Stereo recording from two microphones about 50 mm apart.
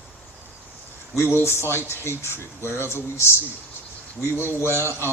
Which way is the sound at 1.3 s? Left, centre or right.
Left.